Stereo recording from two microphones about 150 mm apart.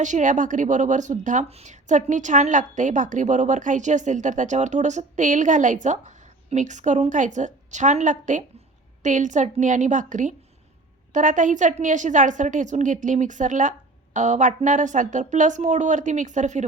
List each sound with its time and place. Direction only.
0.0 s speech: 55° right (ahead or behind)